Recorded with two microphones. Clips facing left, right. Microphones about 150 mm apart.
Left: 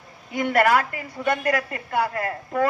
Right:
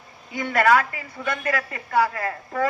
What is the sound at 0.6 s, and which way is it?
A woman's voice, 50° left (ahead or behind).